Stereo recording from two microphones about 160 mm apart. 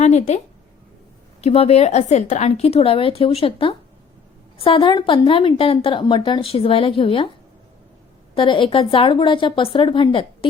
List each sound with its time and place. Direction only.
0.0 s a woman's voice: 45° left (ahead or behind)
8.4 s a woman's voice: 30° left (ahead or behind)